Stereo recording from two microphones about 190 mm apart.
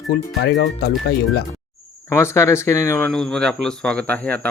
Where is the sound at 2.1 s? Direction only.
15° left (ahead or behind).